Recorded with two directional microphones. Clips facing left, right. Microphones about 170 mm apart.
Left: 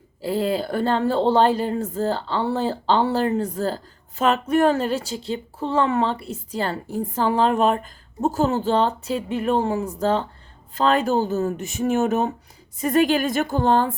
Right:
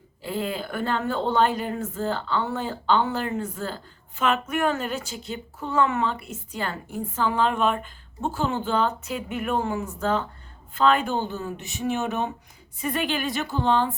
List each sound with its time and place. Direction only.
0.2 s a woman's voice: 35° left (ahead or behind)